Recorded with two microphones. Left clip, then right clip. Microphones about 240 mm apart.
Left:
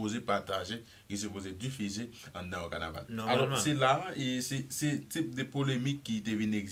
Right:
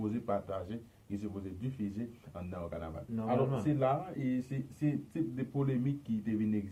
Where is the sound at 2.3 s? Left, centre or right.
Left.